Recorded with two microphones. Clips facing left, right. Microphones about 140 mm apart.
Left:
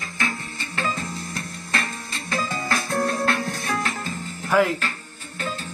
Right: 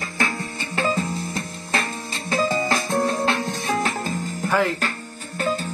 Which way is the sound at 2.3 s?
30° right (ahead or behind).